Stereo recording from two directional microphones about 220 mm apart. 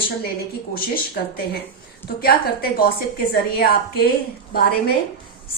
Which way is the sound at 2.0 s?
45° left (ahead or behind).